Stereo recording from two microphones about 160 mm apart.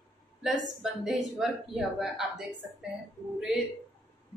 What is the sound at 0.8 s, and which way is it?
Speech, centre (ahead or behind).